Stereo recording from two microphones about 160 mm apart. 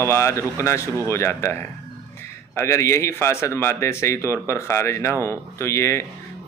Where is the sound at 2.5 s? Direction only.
15° left (ahead or behind).